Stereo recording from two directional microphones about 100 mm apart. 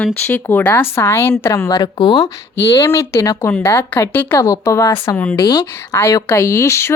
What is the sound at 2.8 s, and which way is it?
A woman's voice, 30° left (ahead or behind).